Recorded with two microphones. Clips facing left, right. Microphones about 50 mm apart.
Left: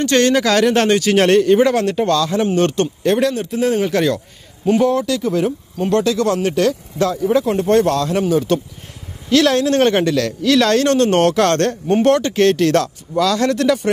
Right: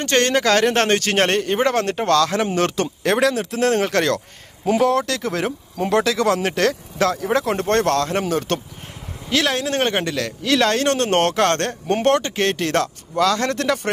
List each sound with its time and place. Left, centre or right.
0.0 s a man's voice: right
2.0 s speech: right
3.0 s speech: right
4.7 s speech: right
9.3 s speech: right